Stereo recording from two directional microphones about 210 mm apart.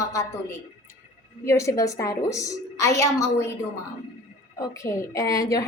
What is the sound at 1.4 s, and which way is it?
A woman's voice, 15° left (ahead or behind).